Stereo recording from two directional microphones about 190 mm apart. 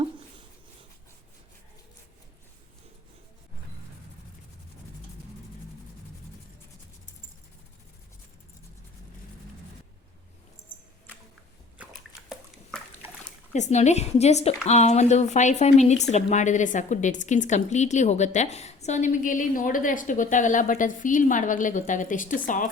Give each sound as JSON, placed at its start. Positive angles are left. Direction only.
{"t": 13.5, "sound": "speech", "side_deg": 35}